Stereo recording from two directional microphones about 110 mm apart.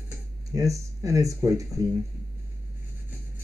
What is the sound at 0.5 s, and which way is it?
Speech, 30° right (ahead or behind).